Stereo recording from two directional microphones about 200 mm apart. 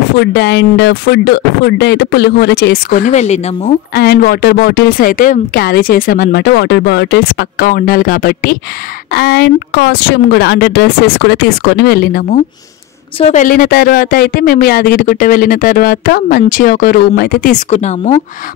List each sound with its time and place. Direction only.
0.2 s speech: 60° left (ahead or behind); by 3.7 s 35° left (ahead or behind)
3.9 s speech: 50° left (ahead or behind); by 18.2 s 35° left (ahead or behind)